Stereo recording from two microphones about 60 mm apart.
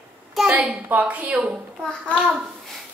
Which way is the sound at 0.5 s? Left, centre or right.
Centre.